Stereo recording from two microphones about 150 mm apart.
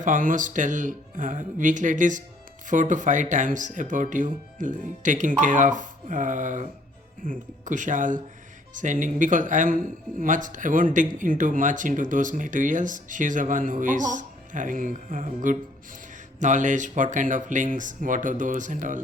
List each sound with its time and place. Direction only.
0.0 s speech: 60° right (ahead or behind)